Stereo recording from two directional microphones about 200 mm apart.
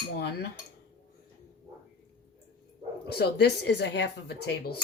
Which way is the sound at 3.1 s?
55° left (ahead or behind).